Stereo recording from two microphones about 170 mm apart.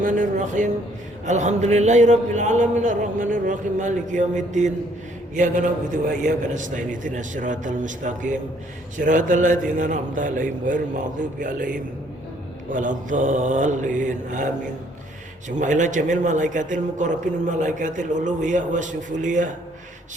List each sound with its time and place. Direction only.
0.0 s a man's voice: 50° right (ahead or behind)
15.4 s a man's voice: 45° right (ahead or behind)